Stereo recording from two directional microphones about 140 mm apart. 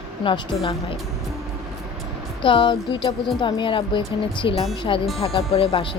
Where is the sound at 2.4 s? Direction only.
35° left (ahead or behind).